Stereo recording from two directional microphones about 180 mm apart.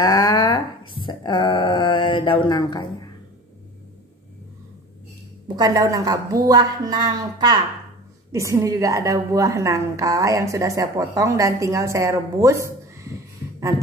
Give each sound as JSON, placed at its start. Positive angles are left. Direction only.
{"t": 0.0, "sound": "a sound", "side_deg": 20}
{"t": 1.0, "sound": "mantra", "side_deg": 25}
{"t": 5.6, "sound": "a woman's voice", "side_deg": -20}